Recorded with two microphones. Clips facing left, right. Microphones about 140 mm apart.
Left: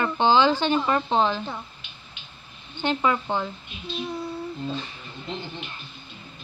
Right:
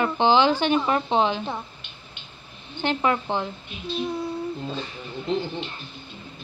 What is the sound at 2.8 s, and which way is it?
Speech, 15° right (ahead or behind).